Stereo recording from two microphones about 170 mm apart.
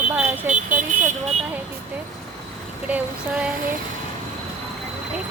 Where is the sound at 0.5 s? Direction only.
50° right (ahead or behind).